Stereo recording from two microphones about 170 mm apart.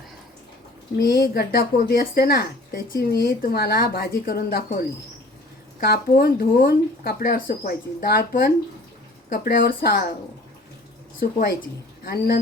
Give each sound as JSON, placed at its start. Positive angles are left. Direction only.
{"t": 1.0, "sound": "a woman's voice", "side_deg": 70}
{"t": 11.2, "sound": "a woman's voice", "side_deg": 60}